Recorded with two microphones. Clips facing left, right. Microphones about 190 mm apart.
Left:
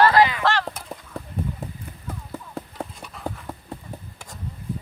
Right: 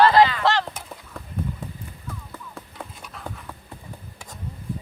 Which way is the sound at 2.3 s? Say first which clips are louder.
Left 6 dB; 35° left (ahead or behind).